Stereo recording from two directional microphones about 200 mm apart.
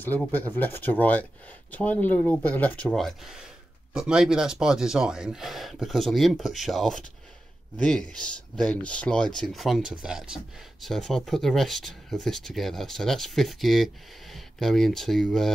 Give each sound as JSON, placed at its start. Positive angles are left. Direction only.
{"t": 0.0, "sound": "speech", "side_deg": 10}